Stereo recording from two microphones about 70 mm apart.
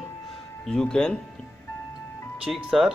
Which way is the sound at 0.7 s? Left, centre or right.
Centre.